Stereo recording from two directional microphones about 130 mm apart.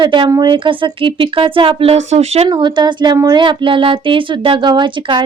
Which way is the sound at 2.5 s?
35° right (ahead or behind).